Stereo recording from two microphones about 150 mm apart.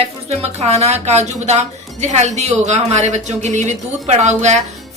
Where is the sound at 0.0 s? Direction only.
45° right (ahead or behind).